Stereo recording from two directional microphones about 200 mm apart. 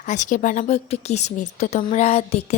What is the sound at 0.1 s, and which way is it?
A woman's voice, 40° left (ahead or behind).